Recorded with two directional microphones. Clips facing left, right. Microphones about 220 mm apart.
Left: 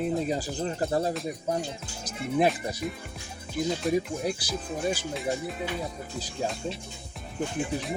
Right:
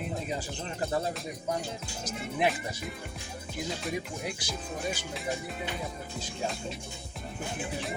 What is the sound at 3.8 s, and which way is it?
Speech, centre (ahead or behind).